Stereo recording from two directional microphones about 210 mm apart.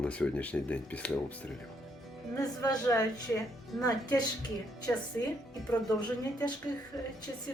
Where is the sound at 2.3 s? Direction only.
15° left (ahead or behind).